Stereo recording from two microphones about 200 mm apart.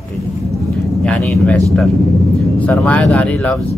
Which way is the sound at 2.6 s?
5° left (ahead or behind).